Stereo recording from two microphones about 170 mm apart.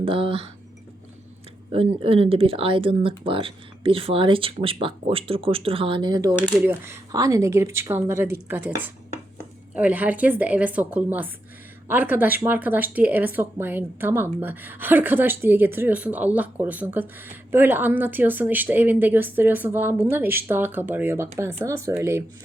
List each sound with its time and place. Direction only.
0.0 s speech: 30° right (ahead or behind)
1.7 s speech: 35° right (ahead or behind)
6.5 s speech: 10° right (ahead or behind)
9.7 s speech: 10° right (ahead or behind)